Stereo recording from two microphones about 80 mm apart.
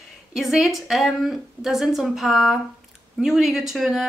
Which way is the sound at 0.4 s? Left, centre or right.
Centre.